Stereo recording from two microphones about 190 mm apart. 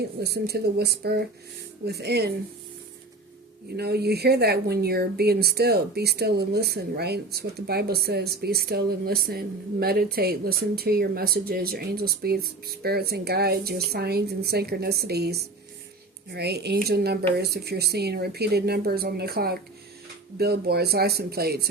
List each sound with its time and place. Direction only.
0.2 s speech: 55° right (ahead or behind)
3.8 s speech: 60° right (ahead or behind)